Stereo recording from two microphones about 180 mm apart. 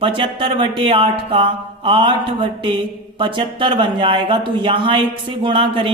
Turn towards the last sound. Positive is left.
turn(degrees=-30)  # may be behind; listen again after turning